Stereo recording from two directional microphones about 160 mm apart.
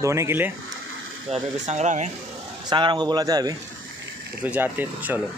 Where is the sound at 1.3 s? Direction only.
45° right (ahead or behind).